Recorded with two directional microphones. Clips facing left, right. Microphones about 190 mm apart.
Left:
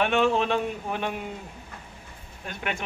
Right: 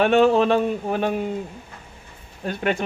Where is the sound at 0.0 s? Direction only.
40° right (ahead or behind).